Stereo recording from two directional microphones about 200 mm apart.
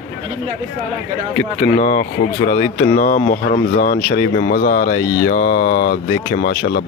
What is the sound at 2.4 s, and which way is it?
Speech, 45° left (ahead or behind).